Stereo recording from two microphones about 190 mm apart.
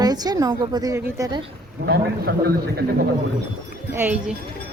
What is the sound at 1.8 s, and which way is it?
A man's voice, 55° right (ahead or behind).